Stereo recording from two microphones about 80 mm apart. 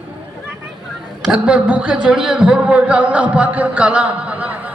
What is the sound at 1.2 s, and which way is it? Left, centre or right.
A man's voice, centre.